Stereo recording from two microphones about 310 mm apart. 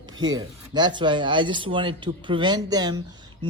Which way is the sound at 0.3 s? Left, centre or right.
Centre.